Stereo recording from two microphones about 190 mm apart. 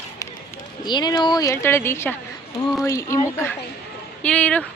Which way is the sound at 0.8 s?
20° left (ahead or behind).